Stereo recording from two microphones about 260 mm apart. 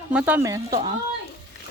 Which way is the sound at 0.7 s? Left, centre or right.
Right.